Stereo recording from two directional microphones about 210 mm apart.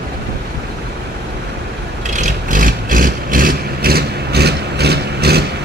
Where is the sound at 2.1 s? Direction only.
35° right (ahead or behind).